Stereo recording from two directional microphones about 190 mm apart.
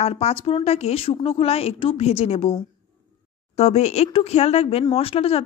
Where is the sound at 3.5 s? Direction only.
35° left (ahead or behind).